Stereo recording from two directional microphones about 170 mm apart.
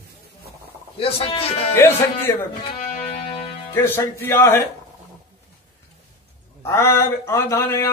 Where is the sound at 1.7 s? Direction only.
15° left (ahead or behind).